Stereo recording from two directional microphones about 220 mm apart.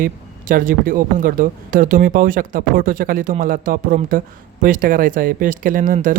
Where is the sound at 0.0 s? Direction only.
40° right (ahead or behind).